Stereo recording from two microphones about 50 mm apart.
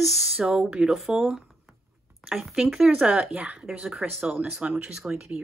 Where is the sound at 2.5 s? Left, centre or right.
Centre.